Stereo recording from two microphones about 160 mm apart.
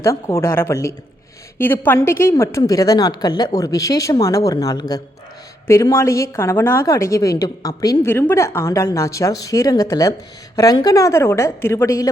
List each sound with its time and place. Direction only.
0.0 s a woman's voice: 15° left (ahead or behind)